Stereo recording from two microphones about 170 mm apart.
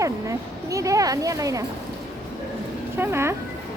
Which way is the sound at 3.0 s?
15° right (ahead or behind).